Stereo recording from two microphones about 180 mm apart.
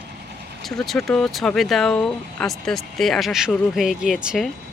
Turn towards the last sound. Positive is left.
turn(degrees=0)  # may be behind; listen again after turning